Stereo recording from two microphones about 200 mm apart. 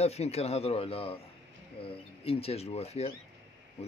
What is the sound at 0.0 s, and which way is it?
Speech, 30° left (ahead or behind).